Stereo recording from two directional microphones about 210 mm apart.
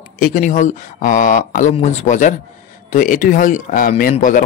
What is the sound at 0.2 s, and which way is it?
Speech, 40° left (ahead or behind).